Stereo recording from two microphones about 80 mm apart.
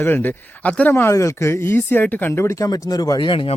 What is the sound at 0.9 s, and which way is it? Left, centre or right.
Speech, left.